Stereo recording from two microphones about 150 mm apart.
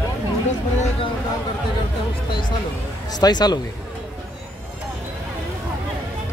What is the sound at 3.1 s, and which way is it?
Speech, 25° left (ahead or behind).